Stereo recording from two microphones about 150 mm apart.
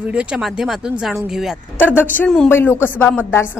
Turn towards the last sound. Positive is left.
turn(degrees=15)  # may be behind; listen again after turning